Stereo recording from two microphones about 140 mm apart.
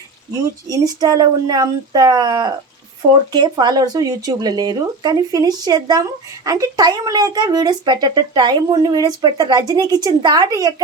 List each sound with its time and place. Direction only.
0.7 s speech: 25° right (ahead or behind)